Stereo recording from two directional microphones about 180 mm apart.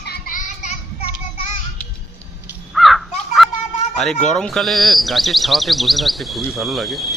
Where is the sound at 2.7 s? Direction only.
Centre (ahead or behind).